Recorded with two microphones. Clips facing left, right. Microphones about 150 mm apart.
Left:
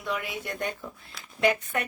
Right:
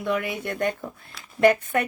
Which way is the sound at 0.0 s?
55° right (ahead or behind).